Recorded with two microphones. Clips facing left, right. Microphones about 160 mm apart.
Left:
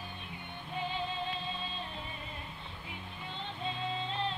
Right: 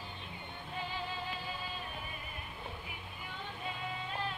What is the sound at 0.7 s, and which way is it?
Music, 20° left (ahead or behind).